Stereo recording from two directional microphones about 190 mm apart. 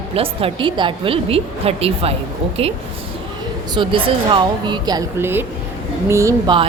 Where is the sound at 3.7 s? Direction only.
25° right (ahead or behind).